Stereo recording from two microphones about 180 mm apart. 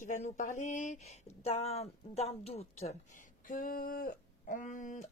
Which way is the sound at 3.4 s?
50° left (ahead or behind).